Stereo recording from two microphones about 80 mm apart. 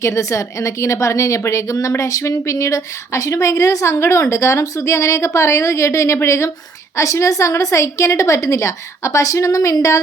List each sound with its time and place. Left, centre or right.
0.0 s a woman's voice: left